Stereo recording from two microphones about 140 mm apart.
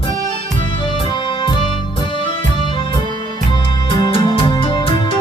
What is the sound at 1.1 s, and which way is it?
Music, 35° left (ahead or behind).